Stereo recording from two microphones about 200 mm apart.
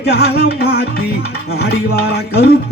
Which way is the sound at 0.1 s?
50° left (ahead or behind).